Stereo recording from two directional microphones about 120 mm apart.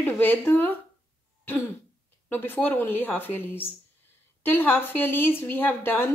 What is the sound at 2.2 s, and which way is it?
A woman's voice, 15° left (ahead or behind).